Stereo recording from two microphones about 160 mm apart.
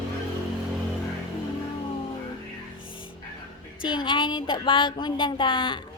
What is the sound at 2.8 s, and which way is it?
Music, 30° left (ahead or behind).